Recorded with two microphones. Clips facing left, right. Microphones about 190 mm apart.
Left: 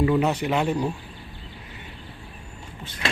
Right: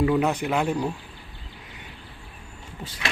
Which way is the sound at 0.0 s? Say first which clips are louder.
Left 1 dB; 5° right (ahead or behind).